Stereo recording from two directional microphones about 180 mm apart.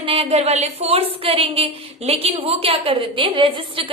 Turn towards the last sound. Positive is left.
turn(degrees=-30)  # may be behind; listen again after turning